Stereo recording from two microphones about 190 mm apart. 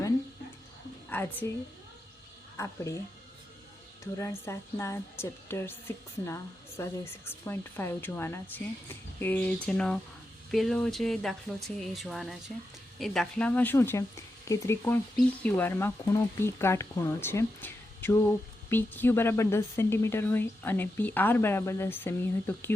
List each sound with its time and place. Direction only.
1.1 s speech: 10° left (ahead or behind)
2.6 s speech: 15° left (ahead or behind)
4.0 s speech: 15° left (ahead or behind)